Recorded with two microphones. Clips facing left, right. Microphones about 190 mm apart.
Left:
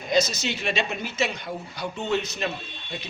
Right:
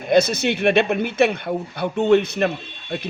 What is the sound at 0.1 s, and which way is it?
A man's voice, 60° right (ahead or behind).